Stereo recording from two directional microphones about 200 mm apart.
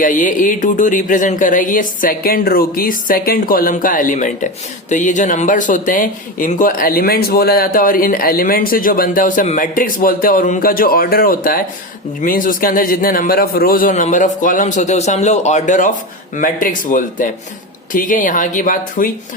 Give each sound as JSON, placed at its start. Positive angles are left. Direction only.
{"t": 0.0, "sound": "a man's voice", "side_deg": 40}